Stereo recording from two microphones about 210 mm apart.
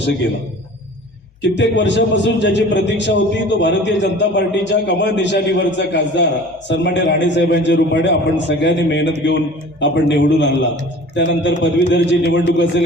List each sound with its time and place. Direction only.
1.4 s a man's voice: 60° left (ahead or behind)